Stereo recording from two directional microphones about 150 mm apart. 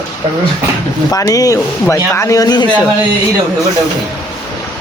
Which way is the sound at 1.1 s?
25° left (ahead or behind).